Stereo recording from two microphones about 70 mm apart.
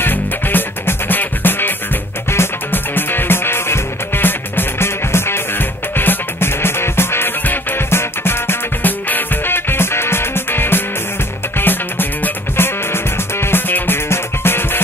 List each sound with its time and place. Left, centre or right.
0.0 s music: left